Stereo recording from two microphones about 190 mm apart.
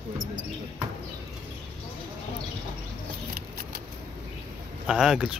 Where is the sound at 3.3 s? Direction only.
50° right (ahead or behind).